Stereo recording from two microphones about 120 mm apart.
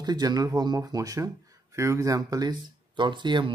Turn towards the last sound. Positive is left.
turn(degrees=-40)  # may be behind; listen again after turning